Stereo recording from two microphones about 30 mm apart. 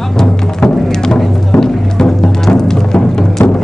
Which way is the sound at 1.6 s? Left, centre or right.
Centre.